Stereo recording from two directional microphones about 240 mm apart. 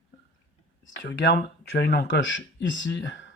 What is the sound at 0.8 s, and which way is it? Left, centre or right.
Speech, left.